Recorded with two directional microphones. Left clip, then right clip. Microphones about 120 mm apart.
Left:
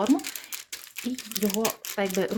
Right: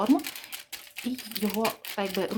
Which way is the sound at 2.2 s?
30° left (ahead or behind).